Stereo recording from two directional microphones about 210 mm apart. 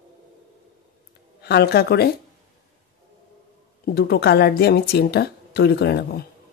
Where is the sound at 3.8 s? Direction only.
50° left (ahead or behind).